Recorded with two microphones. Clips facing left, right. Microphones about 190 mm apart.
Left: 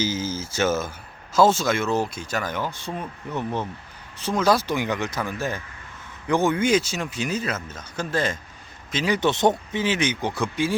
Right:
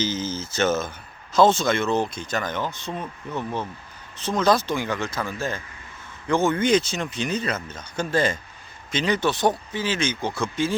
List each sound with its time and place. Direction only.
0.0 s speech: 10° left (ahead or behind)
9.3 s speech: 20° left (ahead or behind)